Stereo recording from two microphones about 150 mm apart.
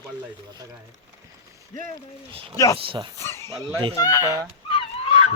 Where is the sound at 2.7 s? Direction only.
35° right (ahead or behind).